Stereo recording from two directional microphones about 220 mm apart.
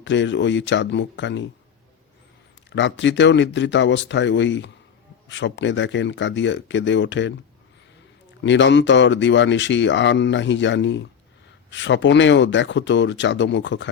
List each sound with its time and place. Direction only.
0.0 s speech: 55° left (ahead or behind)
2.6 s speech: 55° left (ahead or behind)
8.4 s speech: 55° left (ahead or behind)